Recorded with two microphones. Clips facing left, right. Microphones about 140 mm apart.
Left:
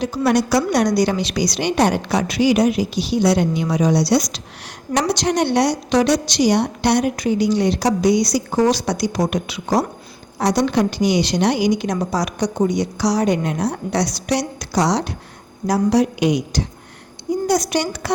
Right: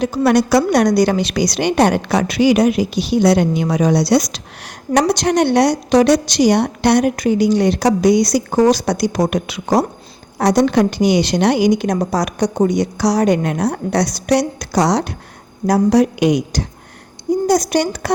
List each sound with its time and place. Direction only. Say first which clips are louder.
0.0 s a woman's voice: right 4 dB; 55° right (ahead or behind)